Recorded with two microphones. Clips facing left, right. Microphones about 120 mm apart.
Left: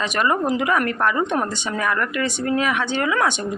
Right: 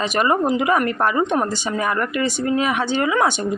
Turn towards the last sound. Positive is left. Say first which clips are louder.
# right 2 dB
turn(degrees=-20)  # may be behind; listen again after turning